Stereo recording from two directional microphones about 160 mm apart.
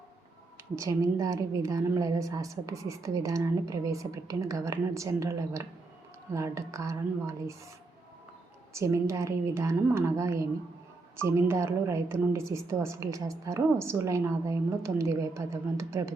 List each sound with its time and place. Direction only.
0.8 s a woman's voice: 20° right (ahead or behind)
8.7 s a woman's voice: 20° right (ahead or behind)